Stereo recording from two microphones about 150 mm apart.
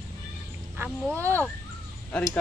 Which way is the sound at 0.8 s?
15° right (ahead or behind).